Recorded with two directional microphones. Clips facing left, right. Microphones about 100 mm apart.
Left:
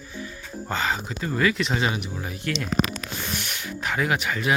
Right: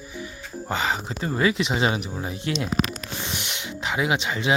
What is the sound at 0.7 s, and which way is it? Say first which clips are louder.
Speech: right 1 dB; 20° right (ahead or behind).